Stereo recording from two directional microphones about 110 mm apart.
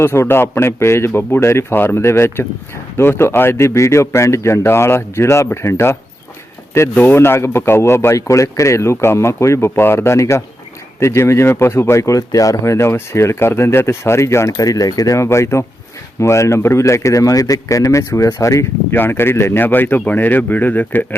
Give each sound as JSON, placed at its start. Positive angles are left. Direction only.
{"t": 0.0, "sound": "speech", "side_deg": 25}